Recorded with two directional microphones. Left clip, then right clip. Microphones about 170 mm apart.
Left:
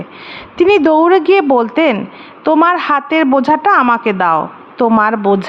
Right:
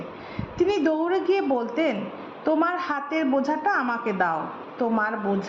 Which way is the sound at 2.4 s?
40° left (ahead or behind).